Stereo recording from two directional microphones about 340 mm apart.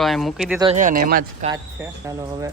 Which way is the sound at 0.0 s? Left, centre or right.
Centre.